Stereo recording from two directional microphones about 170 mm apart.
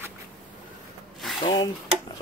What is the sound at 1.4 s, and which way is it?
Speech, 25° left (ahead or behind).